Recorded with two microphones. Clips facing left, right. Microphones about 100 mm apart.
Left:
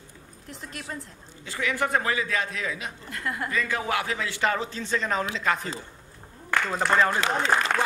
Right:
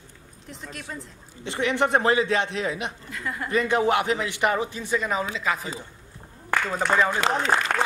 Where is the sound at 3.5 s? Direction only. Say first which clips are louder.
Right 8 dB; 20° right (ahead or behind).